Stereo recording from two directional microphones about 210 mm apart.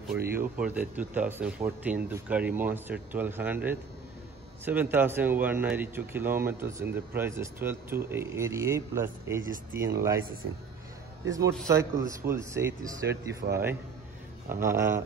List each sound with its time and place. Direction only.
0.6 s a man's voice: 5° right (ahead or behind)
11.2 s a man's voice: 15° right (ahead or behind)
13.4 s a man's voice: 40° right (ahead or behind)
14.5 s a man's voice: 10° right (ahead or behind)